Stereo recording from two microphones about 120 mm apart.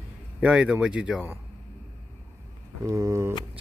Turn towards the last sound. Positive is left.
turn(degrees=-25)  # may be behind; listen again after turning